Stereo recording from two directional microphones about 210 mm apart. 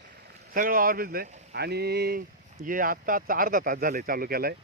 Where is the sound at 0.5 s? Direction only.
40° right (ahead or behind).